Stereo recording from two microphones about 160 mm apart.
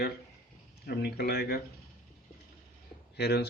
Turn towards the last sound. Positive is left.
turn(degrees=90)